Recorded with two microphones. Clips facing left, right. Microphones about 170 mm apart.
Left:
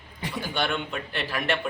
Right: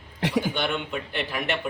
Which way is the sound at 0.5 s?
20° right (ahead or behind).